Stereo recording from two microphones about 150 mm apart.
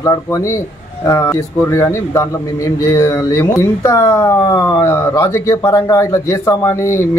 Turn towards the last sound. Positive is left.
turn(degrees=20)  # may be behind; listen again after turning